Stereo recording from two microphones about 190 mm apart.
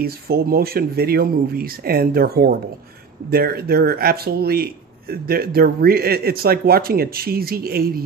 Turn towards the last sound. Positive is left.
turn(degrees=-55)  # may be behind; listen again after turning